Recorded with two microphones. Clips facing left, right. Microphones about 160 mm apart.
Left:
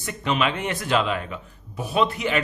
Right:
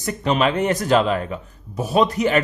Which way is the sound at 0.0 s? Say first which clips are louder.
Right 5 dB; 40° right (ahead or behind).